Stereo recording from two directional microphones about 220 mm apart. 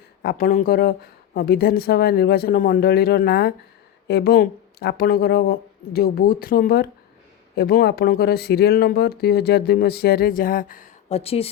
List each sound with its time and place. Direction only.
0.2 s speech: 45° left (ahead or behind); by 11.4 s 25° left (ahead or behind)